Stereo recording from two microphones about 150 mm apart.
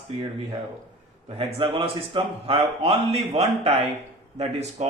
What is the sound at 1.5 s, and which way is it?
A man's voice, 35° right (ahead or behind).